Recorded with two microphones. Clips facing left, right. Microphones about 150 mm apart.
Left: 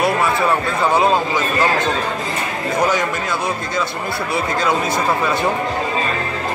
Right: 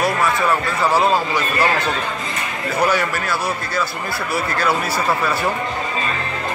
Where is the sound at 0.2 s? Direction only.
25° left (ahead or behind).